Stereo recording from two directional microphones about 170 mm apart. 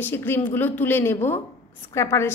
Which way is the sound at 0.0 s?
15° left (ahead or behind).